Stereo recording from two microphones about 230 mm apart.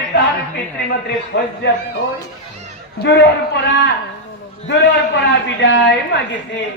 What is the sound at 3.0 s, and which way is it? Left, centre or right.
A man's voice, left.